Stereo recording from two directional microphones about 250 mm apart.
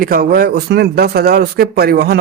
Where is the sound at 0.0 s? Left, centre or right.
Right.